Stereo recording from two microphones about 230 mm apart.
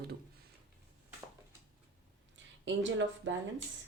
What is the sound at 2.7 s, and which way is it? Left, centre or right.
Speech, right.